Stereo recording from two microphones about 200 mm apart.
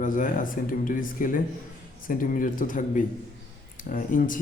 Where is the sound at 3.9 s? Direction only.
40° left (ahead or behind).